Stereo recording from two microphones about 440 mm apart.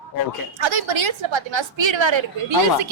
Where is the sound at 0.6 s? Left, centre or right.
Right.